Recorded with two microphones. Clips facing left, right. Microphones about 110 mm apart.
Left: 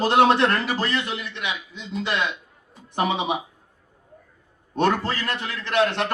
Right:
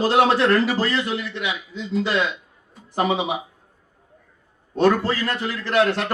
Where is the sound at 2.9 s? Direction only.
65° left (ahead or behind).